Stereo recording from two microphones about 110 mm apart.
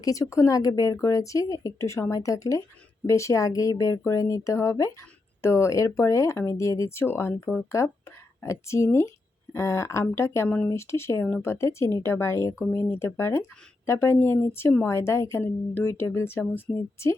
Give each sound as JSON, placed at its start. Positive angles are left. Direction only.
{"t": 0.0, "sound": "a woman's voice", "side_deg": 30}